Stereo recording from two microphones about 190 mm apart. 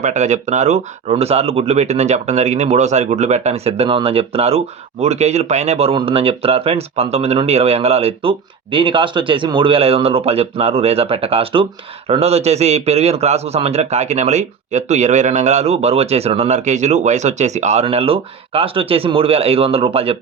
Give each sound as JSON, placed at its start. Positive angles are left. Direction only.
{"t": 0.0, "sound": "speech", "side_deg": -40}